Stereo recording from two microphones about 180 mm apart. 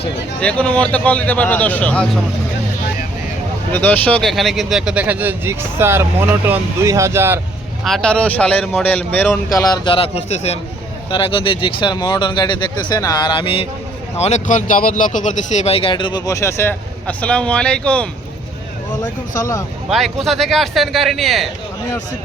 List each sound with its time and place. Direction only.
0.3 s speech: 5° left (ahead or behind)
3.7 s speech: 10° left (ahead or behind); by 7.3 s 15° right (ahead or behind)
7.9 s speech: 5° left (ahead or behind)
9.5 s speech: 20° left (ahead or behind)
19.3 s speech: 15° left (ahead or behind)
19.9 s speech: centre (ahead or behind)